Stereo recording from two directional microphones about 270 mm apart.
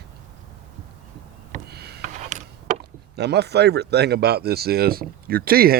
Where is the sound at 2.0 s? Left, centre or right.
Right.